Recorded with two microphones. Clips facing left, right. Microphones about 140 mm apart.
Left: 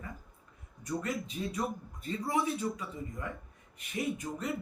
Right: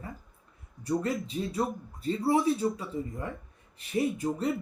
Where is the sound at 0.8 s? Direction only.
30° right (ahead or behind).